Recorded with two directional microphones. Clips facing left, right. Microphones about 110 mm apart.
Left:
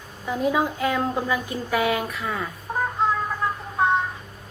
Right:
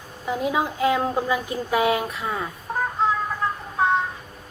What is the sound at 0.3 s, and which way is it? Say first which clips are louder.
A woman's voice: left 1 dB; 15° right (ahead or behind).